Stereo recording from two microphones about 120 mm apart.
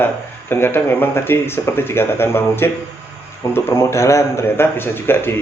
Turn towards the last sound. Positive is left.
turn(degrees=20)  # may be behind; listen again after turning